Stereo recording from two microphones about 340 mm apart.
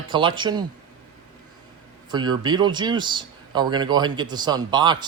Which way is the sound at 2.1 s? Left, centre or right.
Centre.